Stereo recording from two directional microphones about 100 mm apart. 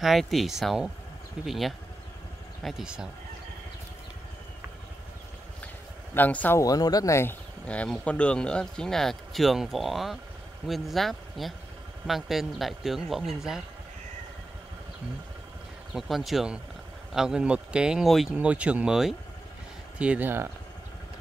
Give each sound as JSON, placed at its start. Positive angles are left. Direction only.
{"t": 0.0, "sound": "speech", "side_deg": 0}
{"t": 6.1, "sound": "speech", "side_deg": 15}
{"t": 6.6, "sound": "speech", "side_deg": 40}
{"t": 7.6, "sound": "speech", "side_deg": 10}
{"t": 15.9, "sound": "speech", "side_deg": -5}
{"t": 18.3, "sound": "speech", "side_deg": -15}